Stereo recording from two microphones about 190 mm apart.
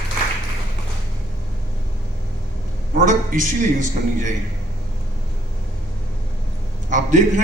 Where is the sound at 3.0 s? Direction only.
45° right (ahead or behind).